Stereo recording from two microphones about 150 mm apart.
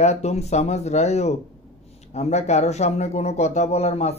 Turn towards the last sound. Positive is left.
turn(degrees=45)  # may be behind; listen again after turning